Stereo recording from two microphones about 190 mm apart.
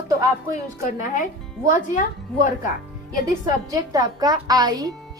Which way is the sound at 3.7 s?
20° right (ahead or behind).